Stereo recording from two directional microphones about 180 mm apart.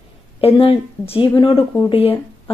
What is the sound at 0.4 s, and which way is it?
Speech, 30° left (ahead or behind).